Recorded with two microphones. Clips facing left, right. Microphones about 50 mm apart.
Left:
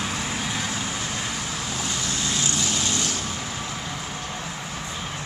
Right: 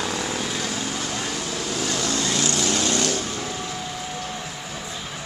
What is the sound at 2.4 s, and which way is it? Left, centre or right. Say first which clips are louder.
Vehicle: right 3 dB; right.